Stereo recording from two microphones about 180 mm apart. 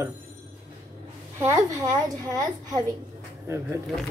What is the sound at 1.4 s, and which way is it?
A woman's voice, 15° right (ahead or behind).